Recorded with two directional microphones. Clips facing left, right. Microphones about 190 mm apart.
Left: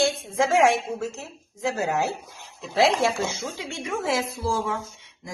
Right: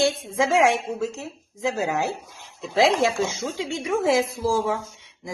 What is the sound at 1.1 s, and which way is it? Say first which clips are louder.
Speech: right 4 dB; 15° right (ahead or behind).